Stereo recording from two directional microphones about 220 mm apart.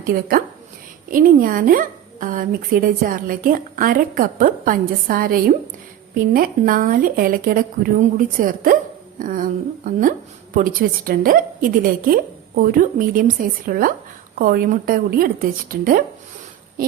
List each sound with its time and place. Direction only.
0.1 s speech: 40° right (ahead or behind)